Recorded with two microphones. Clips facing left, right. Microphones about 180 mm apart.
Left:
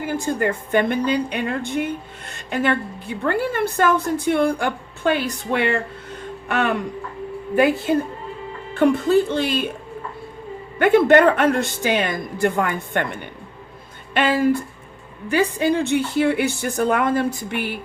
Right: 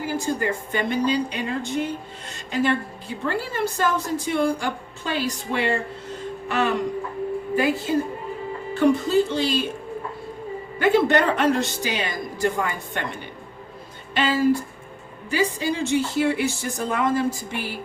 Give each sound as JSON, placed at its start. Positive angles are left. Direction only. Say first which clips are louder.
{"t": 0.0, "sound": "a woman's voice", "louder": "left 3 dB", "side_deg": 55}
{"t": 10.8, "sound": "a woman's voice", "louder": "left 5 dB", "side_deg": 55}